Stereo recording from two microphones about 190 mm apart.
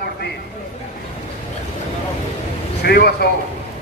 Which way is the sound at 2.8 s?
55° left (ahead or behind).